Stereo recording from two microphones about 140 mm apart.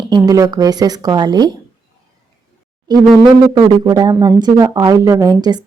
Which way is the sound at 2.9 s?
35° right (ahead or behind).